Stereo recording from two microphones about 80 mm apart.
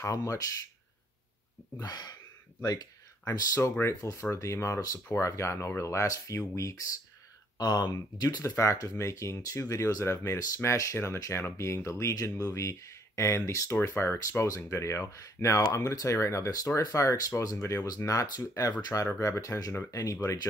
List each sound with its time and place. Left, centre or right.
0.0 s speech: left
1.8 s speech: left
3.3 s speech: left
7.5 s speech: left
19.0 s speech: left